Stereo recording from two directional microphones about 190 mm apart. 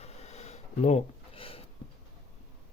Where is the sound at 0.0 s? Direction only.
35° left (ahead or behind).